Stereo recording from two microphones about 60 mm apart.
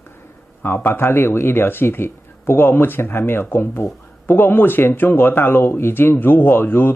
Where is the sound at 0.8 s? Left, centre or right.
Left.